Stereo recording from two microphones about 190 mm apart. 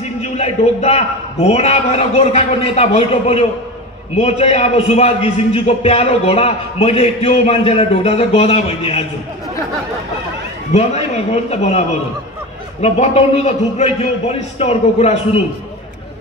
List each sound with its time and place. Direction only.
0.2 s a man's voice: 35° left (ahead or behind)
10.7 s a man's voice: 35° left (ahead or behind)
12.8 s a man's voice: 35° left (ahead or behind)